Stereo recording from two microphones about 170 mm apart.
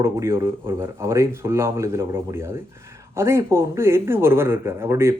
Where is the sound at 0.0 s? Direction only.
15° right (ahead or behind).